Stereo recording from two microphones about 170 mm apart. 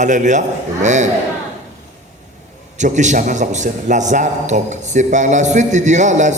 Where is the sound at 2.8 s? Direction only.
45° right (ahead or behind).